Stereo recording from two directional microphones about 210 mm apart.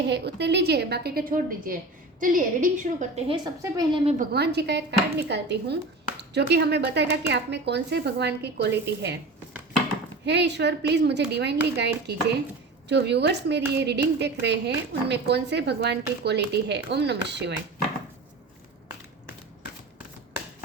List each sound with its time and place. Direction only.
0.0 s a woman's voice: 55° right (ahead or behind); by 3.3 s 30° right (ahead or behind)
3.4 s a woman's voice: 20° right (ahead or behind)
4.2 s speech: 50° right (ahead or behind)
10.2 s speech: 55° right (ahead or behind)